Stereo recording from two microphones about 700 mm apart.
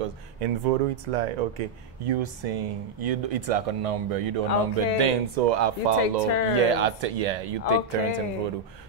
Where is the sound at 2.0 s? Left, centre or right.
Right.